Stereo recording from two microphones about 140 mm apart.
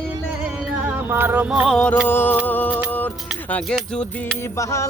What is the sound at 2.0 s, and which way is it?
Music, 15° left (ahead or behind).